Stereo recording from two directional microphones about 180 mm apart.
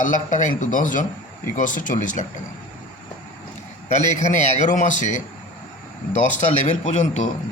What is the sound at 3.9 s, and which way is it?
A man's voice, 40° left (ahead or behind).